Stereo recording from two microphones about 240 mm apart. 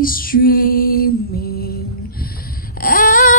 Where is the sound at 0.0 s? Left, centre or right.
Left.